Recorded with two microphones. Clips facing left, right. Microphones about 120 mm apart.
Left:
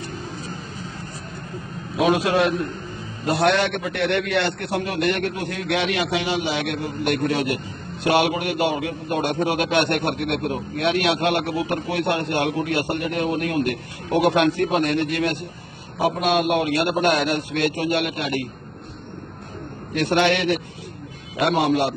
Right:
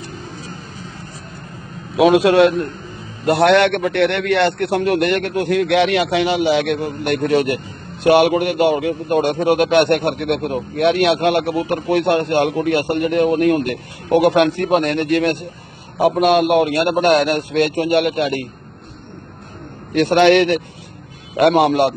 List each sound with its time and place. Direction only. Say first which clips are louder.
2.0 s a man's voice: right 7 dB; 75° right (ahead or behind)
20.0 s a man's voice: right 8 dB; 65° right (ahead or behind)